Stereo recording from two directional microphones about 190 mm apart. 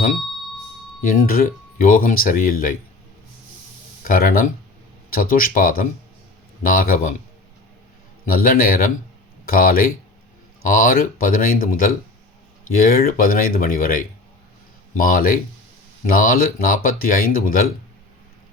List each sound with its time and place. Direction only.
1.1 s speech: 50° left (ahead or behind)
4.0 s speech: 50° left (ahead or behind)
8.3 s speech: 50° left (ahead or behind)